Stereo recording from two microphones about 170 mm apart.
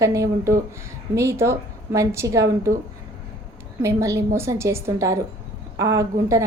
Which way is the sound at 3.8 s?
20° right (ahead or behind).